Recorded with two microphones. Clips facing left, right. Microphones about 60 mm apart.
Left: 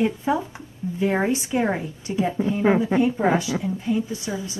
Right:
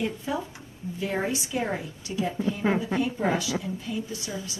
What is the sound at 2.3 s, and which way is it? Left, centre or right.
A woman's voice, left.